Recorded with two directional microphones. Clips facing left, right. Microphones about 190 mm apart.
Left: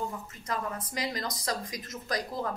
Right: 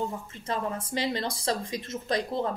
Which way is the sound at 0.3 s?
25° right (ahead or behind).